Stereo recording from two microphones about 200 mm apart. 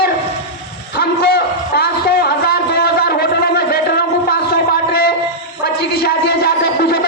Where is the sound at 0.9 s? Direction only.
55° left (ahead or behind).